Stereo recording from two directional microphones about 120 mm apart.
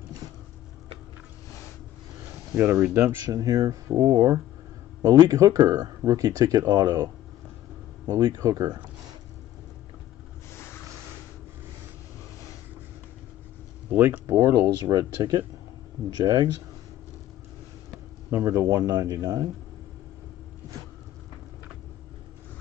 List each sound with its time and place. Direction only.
2.5 s speech: 20° right (ahead or behind)
3.3 s speech: 30° right (ahead or behind)
8.1 s speech: 35° right (ahead or behind)
13.8 s speech: 15° right (ahead or behind); by 16.4 s 35° right (ahead or behind)
18.3 s speech: 25° right (ahead or behind)